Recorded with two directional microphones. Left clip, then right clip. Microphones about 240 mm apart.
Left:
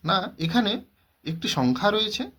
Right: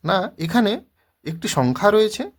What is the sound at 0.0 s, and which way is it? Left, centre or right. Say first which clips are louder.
Speech: right 4 dB; right.